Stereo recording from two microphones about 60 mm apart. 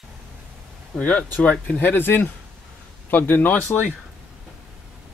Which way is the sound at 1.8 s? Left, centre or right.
Left.